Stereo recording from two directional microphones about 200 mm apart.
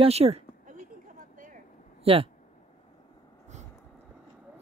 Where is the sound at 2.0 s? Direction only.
30° right (ahead or behind).